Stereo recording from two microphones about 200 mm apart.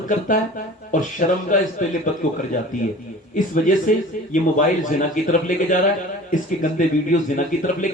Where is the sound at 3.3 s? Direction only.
40° left (ahead or behind).